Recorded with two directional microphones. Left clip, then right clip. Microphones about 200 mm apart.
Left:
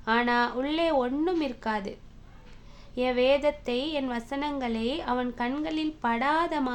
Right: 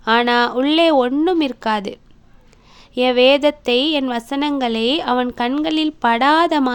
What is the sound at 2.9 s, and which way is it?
A woman's voice, 45° right (ahead or behind).